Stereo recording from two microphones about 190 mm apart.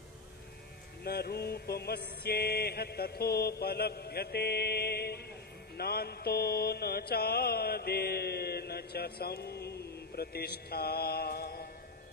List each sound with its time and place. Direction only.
1.0 s mantra: 55° left (ahead or behind)